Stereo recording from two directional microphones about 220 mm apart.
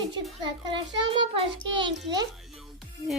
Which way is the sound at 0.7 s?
25° right (ahead or behind).